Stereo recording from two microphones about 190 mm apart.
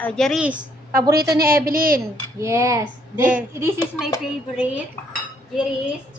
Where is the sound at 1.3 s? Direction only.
50° right (ahead or behind).